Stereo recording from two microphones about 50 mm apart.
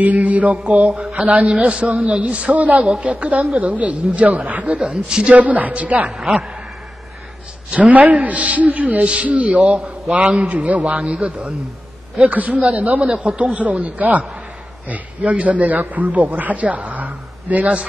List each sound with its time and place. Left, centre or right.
0.0 s a man's voice: right
4.7 s a woman's voice: centre
5.3 s a man's voice: right
7.7 s a man's voice: right